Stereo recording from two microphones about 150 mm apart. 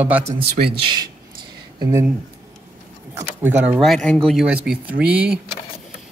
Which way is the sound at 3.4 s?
10° right (ahead or behind).